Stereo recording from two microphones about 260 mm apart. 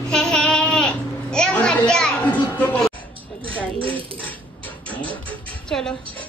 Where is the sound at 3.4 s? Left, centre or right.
Centre.